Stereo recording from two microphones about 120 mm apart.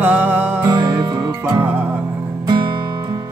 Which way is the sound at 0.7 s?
35° right (ahead or behind).